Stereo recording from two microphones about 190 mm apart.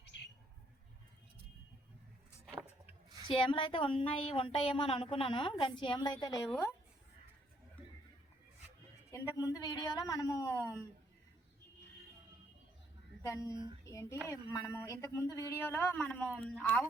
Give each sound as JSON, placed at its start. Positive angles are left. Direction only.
{"t": 3.2, "sound": "speech", "side_deg": 25}
{"t": 6.5, "sound": "speech", "side_deg": 10}
{"t": 9.1, "sound": "speech", "side_deg": 20}
{"t": 13.2, "sound": "speech", "side_deg": 15}
{"t": 13.5, "sound": "speech", "side_deg": -25}
{"t": 13.8, "sound": "speech", "side_deg": 15}